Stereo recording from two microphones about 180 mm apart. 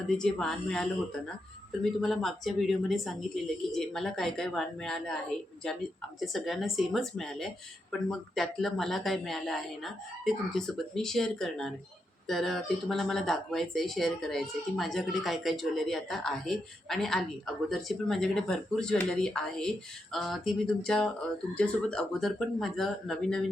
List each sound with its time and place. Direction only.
0.1 s speech: 5° left (ahead or behind)